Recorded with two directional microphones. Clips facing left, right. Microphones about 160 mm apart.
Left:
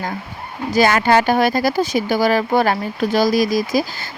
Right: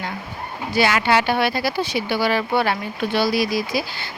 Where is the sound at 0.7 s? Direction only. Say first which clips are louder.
Left 4 dB; 45° left (ahead or behind).